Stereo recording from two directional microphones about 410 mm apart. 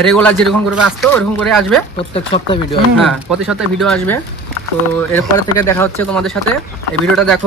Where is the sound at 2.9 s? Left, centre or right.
Centre.